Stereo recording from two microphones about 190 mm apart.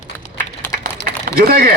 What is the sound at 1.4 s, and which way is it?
Speech, 50° right (ahead or behind).